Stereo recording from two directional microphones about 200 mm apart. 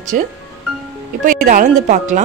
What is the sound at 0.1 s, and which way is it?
Speech, 45° right (ahead or behind).